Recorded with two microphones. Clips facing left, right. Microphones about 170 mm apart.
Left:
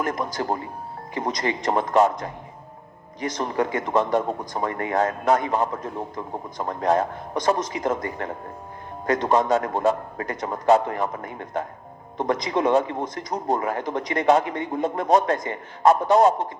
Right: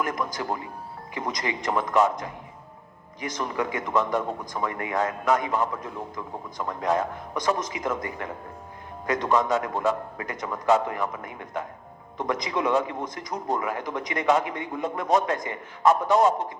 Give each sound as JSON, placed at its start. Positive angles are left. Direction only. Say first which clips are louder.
{"t": 0.0, "sound": "speech", "louder": "left 3 dB", "side_deg": 40}